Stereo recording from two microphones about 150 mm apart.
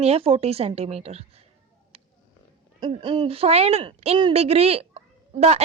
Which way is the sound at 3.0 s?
30° right (ahead or behind).